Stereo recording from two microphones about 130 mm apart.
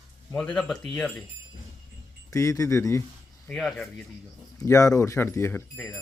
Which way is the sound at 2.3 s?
25° left (ahead or behind).